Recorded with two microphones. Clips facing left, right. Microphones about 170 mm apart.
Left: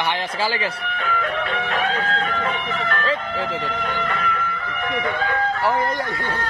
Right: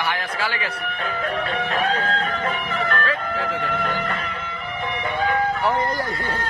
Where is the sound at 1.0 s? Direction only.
40° right (ahead or behind).